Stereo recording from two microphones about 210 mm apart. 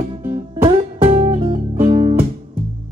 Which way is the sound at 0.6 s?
30° right (ahead or behind).